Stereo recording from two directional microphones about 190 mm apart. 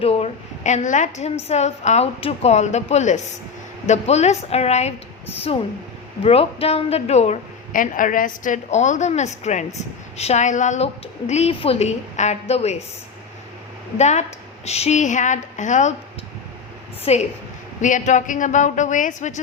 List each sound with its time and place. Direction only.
0.0 s a woman's voice: 30° left (ahead or behind)
14.0 s a woman's voice: 35° left (ahead or behind)
17.1 s a woman's voice: 35° left (ahead or behind)